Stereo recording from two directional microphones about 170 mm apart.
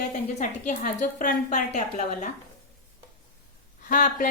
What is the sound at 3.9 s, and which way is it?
Speech, 50° left (ahead or behind).